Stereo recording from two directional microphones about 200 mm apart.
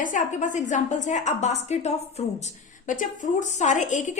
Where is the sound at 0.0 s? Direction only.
40° left (ahead or behind).